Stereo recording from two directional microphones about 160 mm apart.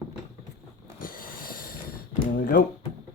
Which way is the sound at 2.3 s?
65° left (ahead or behind).